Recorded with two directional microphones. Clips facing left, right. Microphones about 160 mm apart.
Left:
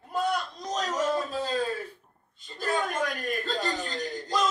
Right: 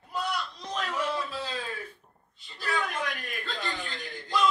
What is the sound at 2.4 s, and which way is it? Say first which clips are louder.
Chuckle: left 3 dB; 45° left (ahead or behind).